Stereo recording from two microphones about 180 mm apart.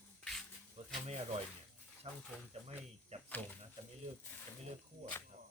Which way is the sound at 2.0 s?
30° right (ahead or behind).